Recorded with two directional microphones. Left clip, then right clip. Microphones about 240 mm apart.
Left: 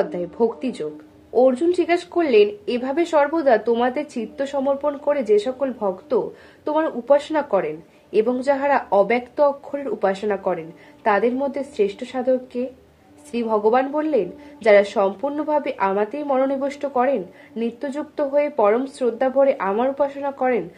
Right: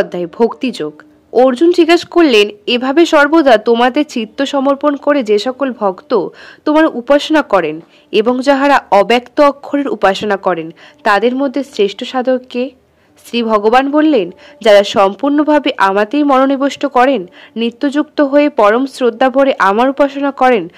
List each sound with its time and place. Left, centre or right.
0.1 s speech: right